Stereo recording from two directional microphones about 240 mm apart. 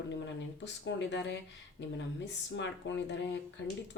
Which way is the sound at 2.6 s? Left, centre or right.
Left.